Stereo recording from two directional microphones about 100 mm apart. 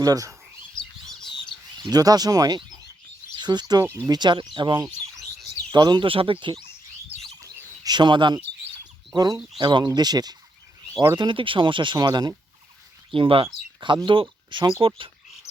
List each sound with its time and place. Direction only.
0.0 s speech: 35° right (ahead or behind)
0.8 s bird: 5° left (ahead or behind)
1.8 s speech: 40° right (ahead or behind)
2.6 s a sound: 45° right (ahead or behind)
3.3 s speech: 45° right (ahead or behind)
6.1 s speech: 65° right (ahead or behind)
7.3 s bird: 40° right (ahead or behind)
9.1 s speech: 40° right (ahead or behind)
11.2 s speech: 55° right (ahead or behind)
13.1 s speech: 65° right (ahead or behind)